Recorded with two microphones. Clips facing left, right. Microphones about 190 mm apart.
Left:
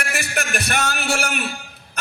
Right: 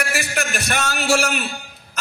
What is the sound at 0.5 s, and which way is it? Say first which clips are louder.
Speech: left 3 dB; 60° left (ahead or behind).